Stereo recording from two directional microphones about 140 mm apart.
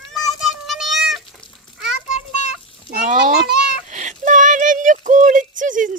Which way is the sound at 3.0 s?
65° right (ahead or behind).